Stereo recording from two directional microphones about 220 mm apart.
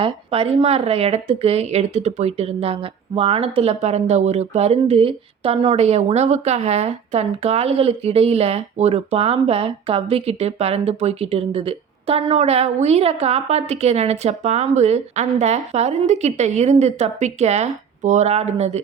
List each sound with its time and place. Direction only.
0.0 s speech: 25° right (ahead or behind)